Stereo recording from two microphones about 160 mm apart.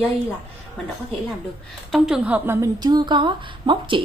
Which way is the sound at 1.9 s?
5° right (ahead or behind).